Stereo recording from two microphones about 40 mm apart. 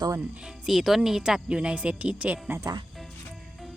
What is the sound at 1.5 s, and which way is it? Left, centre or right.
Speech, right.